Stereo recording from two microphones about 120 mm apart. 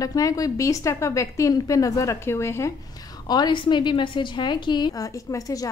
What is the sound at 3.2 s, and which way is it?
A woman's voice, 35° left (ahead or behind).